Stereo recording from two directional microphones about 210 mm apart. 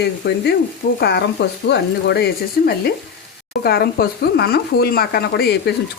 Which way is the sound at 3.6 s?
50° left (ahead or behind).